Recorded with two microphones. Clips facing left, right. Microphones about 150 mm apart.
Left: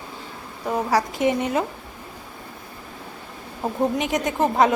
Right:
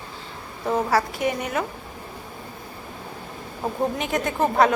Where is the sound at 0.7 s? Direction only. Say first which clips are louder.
Even; 15° left (ahead or behind).